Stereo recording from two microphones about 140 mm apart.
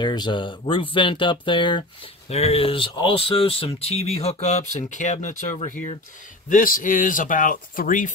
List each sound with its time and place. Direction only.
0.0 s speech: 30° left (ahead or behind)
2.2 s speech: 50° left (ahead or behind)
6.5 s speech: 75° left (ahead or behind)